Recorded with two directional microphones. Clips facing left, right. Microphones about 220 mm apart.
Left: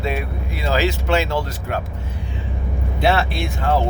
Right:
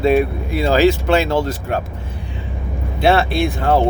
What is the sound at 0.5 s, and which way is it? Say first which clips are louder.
Speech: right 7 dB; 30° right (ahead or behind).